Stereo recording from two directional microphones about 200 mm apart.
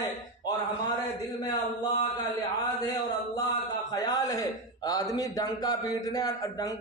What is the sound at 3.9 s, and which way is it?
A man's voice, 20° left (ahead or behind).